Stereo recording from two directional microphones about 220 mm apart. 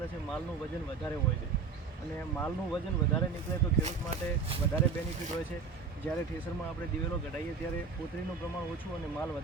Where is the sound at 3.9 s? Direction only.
30° right (ahead or behind).